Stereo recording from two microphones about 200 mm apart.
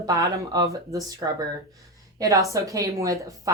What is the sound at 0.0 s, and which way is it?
Speech, 20° right (ahead or behind).